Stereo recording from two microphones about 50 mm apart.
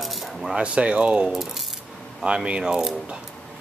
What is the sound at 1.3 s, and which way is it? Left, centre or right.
Speech, centre.